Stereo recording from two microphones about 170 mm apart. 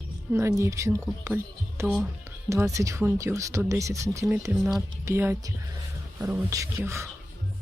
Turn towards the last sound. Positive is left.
turn(degrees=-15)  # may be behind; listen again after turning